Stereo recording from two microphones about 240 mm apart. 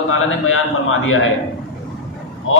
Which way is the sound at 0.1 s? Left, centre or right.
Left.